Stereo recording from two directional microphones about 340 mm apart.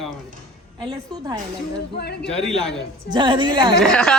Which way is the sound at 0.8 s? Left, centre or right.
Centre.